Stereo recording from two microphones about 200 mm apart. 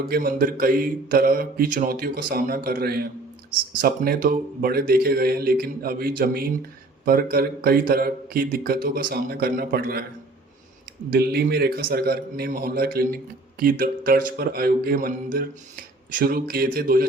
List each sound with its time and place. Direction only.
0.0 s a man's voice: 50° right (ahead or behind)
11.1 s a man's voice: 50° right (ahead or behind)